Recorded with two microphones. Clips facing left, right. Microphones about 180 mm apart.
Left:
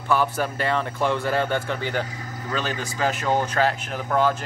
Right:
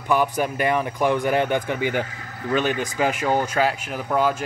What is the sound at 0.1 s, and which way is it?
Speech, 15° right (ahead or behind).